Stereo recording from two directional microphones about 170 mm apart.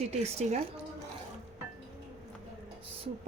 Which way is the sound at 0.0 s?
40° right (ahead or behind).